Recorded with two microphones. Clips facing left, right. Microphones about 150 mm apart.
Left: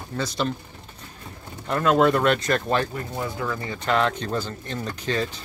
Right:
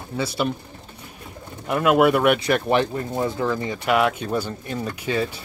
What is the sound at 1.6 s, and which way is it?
Speech, 10° right (ahead or behind).